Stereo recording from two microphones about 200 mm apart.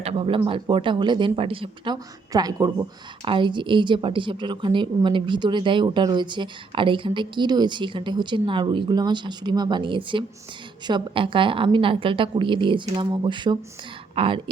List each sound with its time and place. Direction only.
0.0 s a woman's voice: 25° right (ahead or behind)